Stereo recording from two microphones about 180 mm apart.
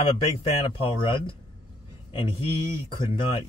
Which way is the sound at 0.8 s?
25° left (ahead or behind).